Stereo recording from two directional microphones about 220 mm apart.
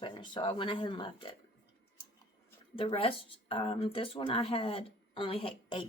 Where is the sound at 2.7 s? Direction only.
25° left (ahead or behind).